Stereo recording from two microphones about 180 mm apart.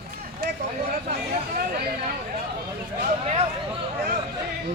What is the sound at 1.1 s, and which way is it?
Chatter, 60° right (ahead or behind).